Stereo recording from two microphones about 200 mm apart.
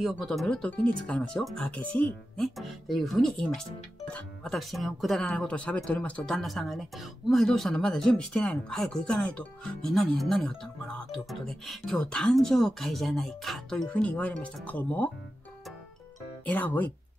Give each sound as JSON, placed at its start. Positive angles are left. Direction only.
{"t": 0.0, "sound": "speech", "side_deg": 0}
{"t": 16.4, "sound": "speech", "side_deg": 10}